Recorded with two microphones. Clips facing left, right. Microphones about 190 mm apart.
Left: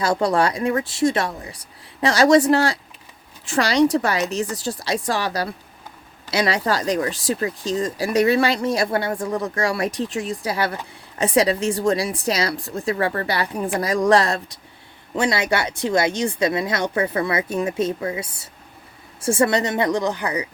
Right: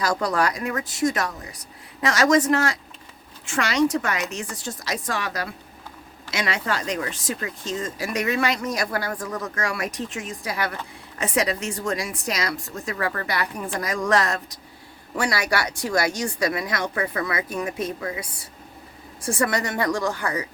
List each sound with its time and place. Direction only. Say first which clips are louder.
0.0 s speech: left 4 dB; 30° left (ahead or behind)